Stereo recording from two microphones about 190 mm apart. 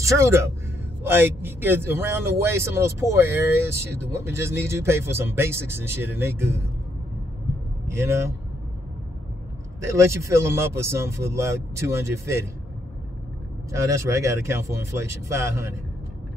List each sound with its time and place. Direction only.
0.0 s a man's voice: 15° right (ahead or behind)
9.8 s a man's voice: 15° right (ahead or behind)
13.7 s a man's voice: 15° right (ahead or behind)